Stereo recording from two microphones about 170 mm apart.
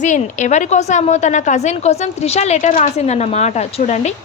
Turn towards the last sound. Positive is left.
turn(degrees=40)  # may be behind; listen again after turning